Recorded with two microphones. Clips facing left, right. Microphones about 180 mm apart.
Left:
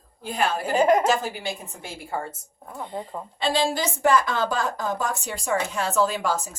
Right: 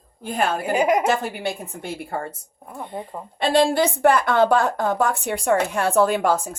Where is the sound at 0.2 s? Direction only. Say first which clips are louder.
Right 2 dB; 50° right (ahead or behind).